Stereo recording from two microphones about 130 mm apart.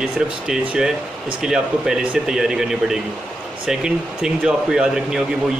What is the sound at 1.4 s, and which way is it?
Speech, 5° right (ahead or behind).